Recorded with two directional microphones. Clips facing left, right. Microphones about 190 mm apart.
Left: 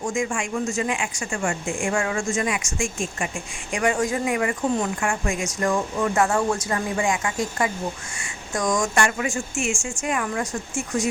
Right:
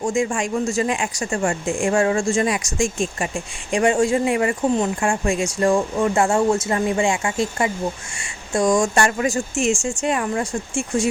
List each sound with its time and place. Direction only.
0.0 s speech: 35° right (ahead or behind)